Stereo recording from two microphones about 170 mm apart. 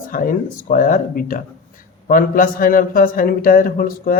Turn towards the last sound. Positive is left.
turn(degrees=55)  # may be behind; listen again after turning